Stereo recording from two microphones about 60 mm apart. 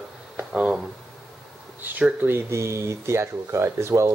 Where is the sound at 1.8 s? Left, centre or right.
Right.